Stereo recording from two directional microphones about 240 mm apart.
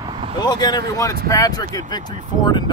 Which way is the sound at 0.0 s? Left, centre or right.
Right.